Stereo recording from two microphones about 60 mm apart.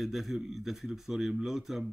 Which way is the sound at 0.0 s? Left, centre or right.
Centre.